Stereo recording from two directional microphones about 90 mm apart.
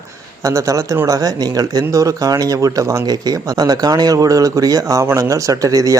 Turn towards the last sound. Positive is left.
turn(degrees=-40)  # may be behind; listen again after turning